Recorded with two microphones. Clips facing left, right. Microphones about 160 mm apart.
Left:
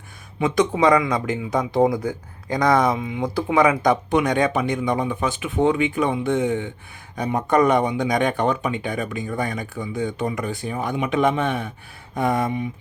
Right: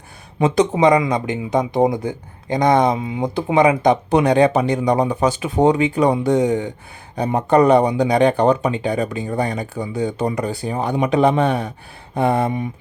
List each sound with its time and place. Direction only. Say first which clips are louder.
0.3 s speech: right 4 dB; 35° right (ahead or behind)
0.7 s speech: right 3 dB; 20° right (ahead or behind)